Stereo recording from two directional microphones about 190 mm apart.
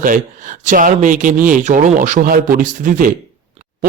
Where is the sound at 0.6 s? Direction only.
45° right (ahead or behind).